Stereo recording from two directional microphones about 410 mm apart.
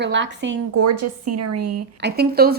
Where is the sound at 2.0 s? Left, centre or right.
Right.